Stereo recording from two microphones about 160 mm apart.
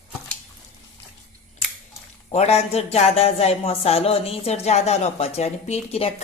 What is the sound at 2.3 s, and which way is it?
Speech, 40° left (ahead or behind).